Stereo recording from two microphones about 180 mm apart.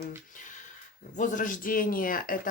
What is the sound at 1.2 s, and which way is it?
Speech, 45° left (ahead or behind).